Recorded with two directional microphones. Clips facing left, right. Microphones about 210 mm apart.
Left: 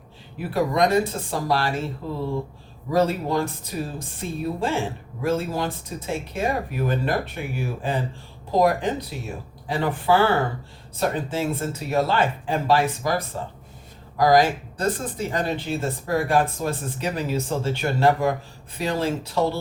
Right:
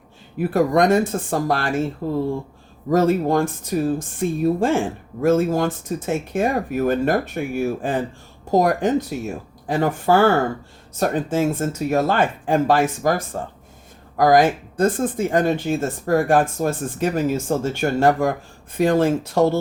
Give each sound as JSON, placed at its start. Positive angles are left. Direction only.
{"t": 0.3, "sound": "speech", "side_deg": -50}